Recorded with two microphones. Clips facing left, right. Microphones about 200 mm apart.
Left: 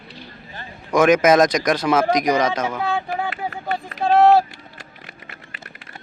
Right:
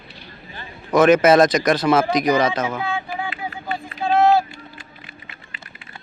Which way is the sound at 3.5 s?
65° left (ahead or behind).